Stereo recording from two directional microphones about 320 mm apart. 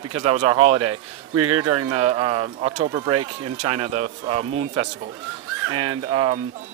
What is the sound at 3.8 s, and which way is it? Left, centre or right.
A man's voice, centre.